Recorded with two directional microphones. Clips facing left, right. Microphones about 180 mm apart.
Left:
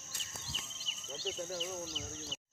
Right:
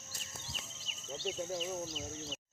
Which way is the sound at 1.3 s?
10° right (ahead or behind).